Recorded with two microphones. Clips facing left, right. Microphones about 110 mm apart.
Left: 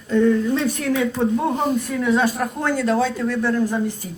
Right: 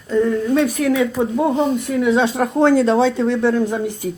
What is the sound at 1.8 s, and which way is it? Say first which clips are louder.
Speech: right 3 dB; 20° right (ahead or behind).